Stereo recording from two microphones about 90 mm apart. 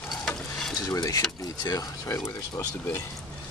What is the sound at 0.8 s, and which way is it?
Speech, 40° left (ahead or behind).